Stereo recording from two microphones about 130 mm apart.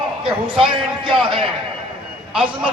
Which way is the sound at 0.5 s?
40° right (ahead or behind).